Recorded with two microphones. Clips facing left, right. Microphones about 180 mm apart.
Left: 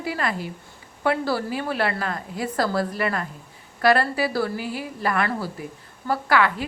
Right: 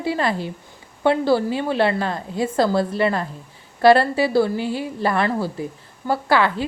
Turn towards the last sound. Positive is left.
turn(degrees=-30)  # may be behind; listen again after turning